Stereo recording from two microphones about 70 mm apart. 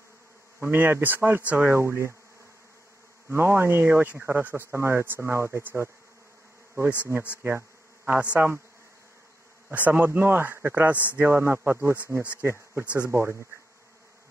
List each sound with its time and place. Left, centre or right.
0.6 s speech: right
1.7 s speech: right
3.3 s speech: right
4.7 s speech: right
5.6 s speech: right
6.7 s bee: right
8.0 s speech: right
9.7 s speech: right
12.4 s bee: right
12.8 s speech: left
13.1 s speech: right